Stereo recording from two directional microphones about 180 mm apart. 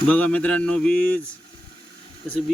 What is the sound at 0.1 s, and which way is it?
Speech, 5° left (ahead or behind).